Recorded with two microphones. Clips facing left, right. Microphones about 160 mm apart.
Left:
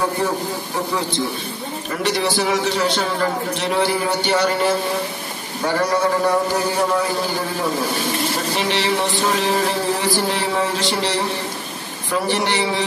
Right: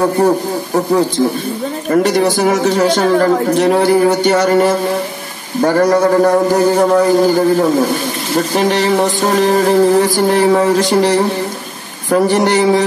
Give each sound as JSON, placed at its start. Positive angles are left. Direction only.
{"t": 1.9, "sound": "music", "side_deg": -45}